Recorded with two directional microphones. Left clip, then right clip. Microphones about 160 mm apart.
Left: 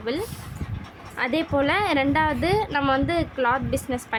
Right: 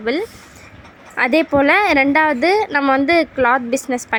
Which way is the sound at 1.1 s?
40° right (ahead or behind).